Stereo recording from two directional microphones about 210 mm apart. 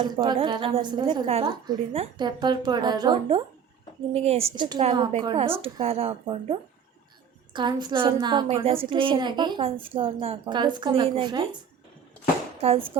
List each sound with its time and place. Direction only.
0.0 s a woman's voice: 20° right (ahead or behind)
12.6 s a woman's voice: 25° right (ahead or behind)